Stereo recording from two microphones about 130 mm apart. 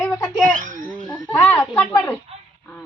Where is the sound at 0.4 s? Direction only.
90° right.